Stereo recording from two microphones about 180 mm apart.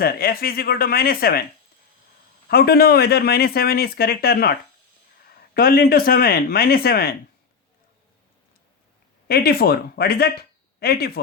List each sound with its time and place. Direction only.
0.0 s speech: 60° left (ahead or behind)
2.5 s speech: 60° left (ahead or behind)
5.5 s speech: 55° left (ahead or behind)
9.2 s speech: 60° left (ahead or behind)